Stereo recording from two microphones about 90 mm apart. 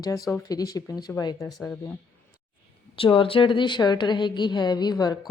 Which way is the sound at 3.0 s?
80° left.